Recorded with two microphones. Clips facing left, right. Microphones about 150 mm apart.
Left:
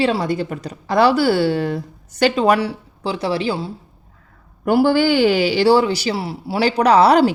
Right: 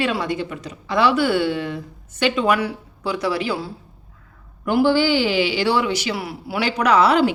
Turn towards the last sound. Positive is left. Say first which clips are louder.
# left 4 dB
turn(degrees=35)  # may be behind; listen again after turning